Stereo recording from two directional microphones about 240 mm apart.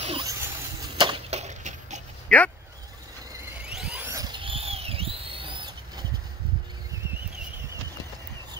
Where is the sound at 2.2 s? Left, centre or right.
Centre.